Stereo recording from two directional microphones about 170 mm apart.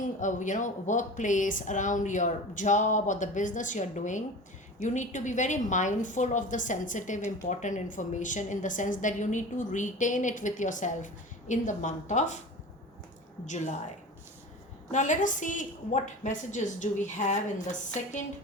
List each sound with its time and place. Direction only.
0.0 s a woman's voice: 45° left (ahead or behind)
13.4 s a woman's voice: 45° left (ahead or behind)
14.9 s a woman's voice: 45° left (ahead or behind)